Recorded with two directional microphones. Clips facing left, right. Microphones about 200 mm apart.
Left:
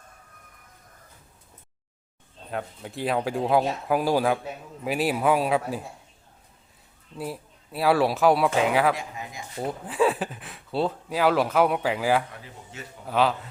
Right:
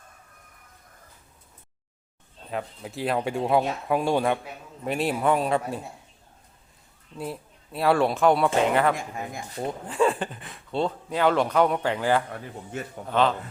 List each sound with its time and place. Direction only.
2.5 s speech: centre (ahead or behind)
7.2 s speech: 5° left (ahead or behind)
9.0 s speech: 50° right (ahead or behind)
9.6 s speech: 5° left (ahead or behind)
12.3 s speech: 50° right (ahead or behind)
13.1 s speech: 5° left (ahead or behind)